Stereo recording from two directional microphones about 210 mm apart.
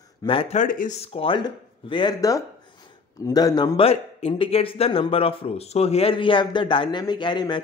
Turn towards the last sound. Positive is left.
turn(degrees=20)  # may be behind; listen again after turning